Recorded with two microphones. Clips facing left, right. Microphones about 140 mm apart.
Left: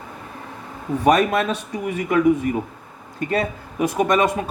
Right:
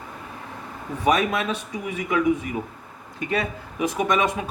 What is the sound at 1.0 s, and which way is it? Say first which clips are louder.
Speech: left 4 dB; 45° left (ahead or behind).